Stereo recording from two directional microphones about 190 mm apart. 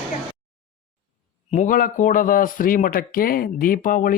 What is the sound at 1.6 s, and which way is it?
A man's voice, 45° left (ahead or behind).